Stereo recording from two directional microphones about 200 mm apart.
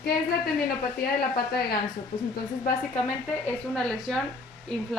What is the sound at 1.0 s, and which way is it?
Speech, 50° left (ahead or behind).